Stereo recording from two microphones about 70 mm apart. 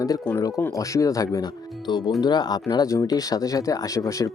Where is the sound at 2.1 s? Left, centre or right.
Left.